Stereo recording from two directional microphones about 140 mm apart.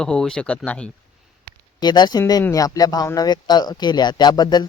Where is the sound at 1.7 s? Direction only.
30° left (ahead or behind).